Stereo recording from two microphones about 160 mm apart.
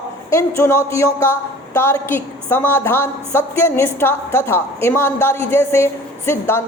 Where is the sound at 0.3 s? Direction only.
15° left (ahead or behind).